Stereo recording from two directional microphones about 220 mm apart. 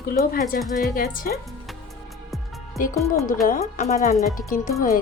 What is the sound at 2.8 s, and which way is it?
Speech, 40° left (ahead or behind).